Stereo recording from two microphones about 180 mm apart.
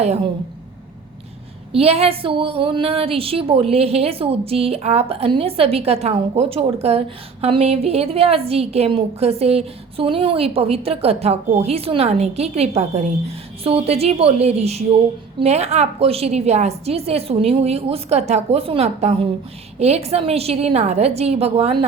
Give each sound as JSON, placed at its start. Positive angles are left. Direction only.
{"t": 1.7, "sound": "a woman's voice", "side_deg": -35}